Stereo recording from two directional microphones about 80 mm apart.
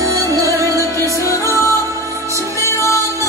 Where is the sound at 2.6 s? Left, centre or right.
Left.